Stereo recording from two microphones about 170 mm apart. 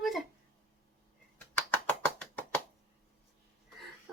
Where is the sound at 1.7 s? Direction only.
10° left (ahead or behind).